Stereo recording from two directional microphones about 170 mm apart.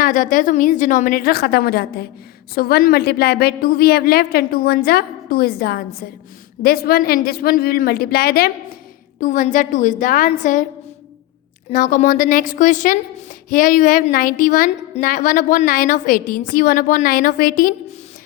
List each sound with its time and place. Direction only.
0.0 s a woman's voice: 50° left (ahead or behind)
9.2 s a woman's voice: 50° left (ahead or behind)
11.7 s a woman's voice: 50° left (ahead or behind)